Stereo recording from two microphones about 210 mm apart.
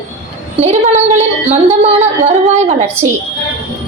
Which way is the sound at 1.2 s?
35° right (ahead or behind).